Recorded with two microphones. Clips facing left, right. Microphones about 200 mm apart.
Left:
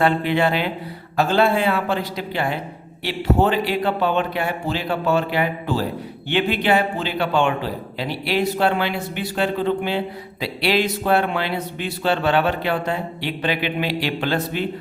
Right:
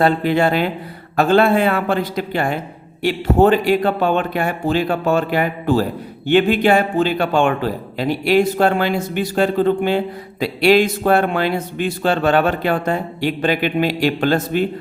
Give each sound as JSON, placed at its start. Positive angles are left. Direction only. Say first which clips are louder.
{"t": 0.0, "sound": "speech", "louder": "right 3 dB", "side_deg": -40}